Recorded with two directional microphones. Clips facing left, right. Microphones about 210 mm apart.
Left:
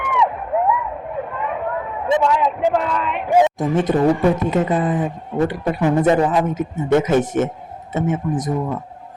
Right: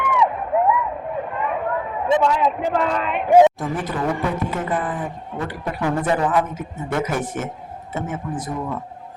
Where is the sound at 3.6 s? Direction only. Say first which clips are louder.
Left 8 dB; 20° left (ahead or behind).